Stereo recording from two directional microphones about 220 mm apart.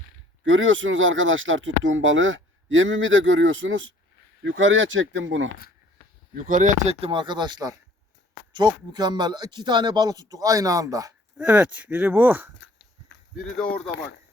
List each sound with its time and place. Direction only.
0.4 s speech: 60° right (ahead or behind)
6.3 s speech: 35° right (ahead or behind); by 12.5 s 10° right (ahead or behind)
12.5 s a sound: 55° left (ahead or behind)
13.6 s speech: 5° left (ahead or behind)